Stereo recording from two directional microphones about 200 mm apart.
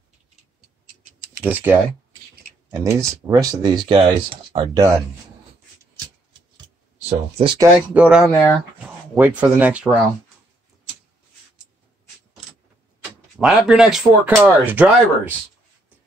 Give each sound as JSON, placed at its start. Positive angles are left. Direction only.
{"t": 1.4, "sound": "speech", "side_deg": -10}
{"t": 6.5, "sound": "a sound", "side_deg": -30}
{"t": 7.5, "sound": "speech", "side_deg": -10}
{"t": 13.0, "sound": "speech", "side_deg": -5}